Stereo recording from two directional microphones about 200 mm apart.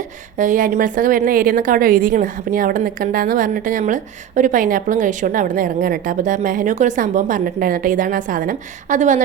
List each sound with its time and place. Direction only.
0.3 s a woman's voice: 40° right (ahead or behind)